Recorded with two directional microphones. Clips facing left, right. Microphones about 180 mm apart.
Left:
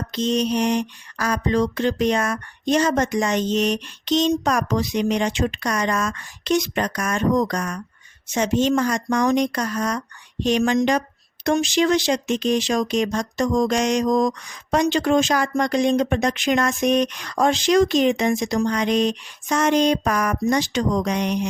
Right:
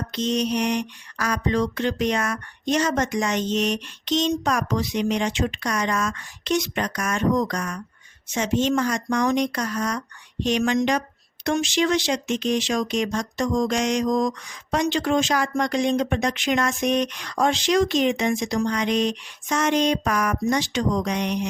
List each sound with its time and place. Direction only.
0.1 s speech: 30° left (ahead or behind)